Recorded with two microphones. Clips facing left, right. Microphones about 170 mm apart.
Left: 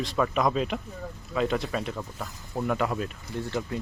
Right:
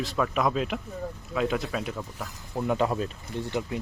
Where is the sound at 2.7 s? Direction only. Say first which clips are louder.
Right 2 dB; 25° right (ahead or behind).